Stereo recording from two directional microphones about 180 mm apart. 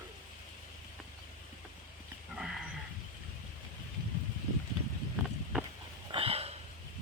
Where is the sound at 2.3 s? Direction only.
Centre (ahead or behind).